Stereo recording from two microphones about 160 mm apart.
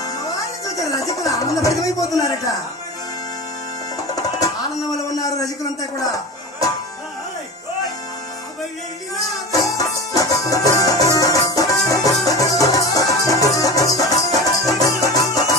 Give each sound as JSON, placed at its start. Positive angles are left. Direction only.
{"t": 0.7, "sound": "speech", "side_deg": 20}
{"t": 4.1, "sound": "music", "side_deg": 20}
{"t": 5.8, "sound": "speech", "side_deg": 20}
{"t": 9.5, "sound": "music", "side_deg": 20}